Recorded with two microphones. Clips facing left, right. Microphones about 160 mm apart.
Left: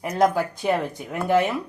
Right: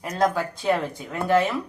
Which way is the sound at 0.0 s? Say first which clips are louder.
Left 3 dB; 15° left (ahead or behind).